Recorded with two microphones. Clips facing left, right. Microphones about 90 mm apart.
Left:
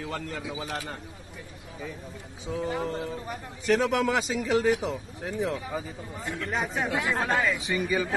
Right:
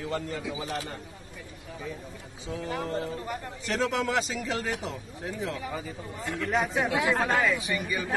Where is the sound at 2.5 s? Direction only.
10° left (ahead or behind).